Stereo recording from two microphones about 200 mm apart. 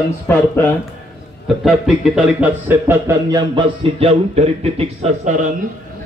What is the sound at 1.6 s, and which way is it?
Speech, 5° right (ahead or behind).